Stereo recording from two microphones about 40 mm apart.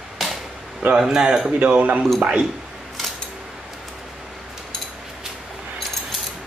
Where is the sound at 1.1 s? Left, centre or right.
Right.